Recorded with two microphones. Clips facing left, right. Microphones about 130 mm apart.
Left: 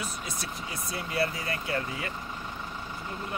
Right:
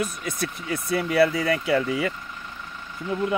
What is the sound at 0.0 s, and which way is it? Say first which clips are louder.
Speech: right 8 dB; 55° right (ahead or behind).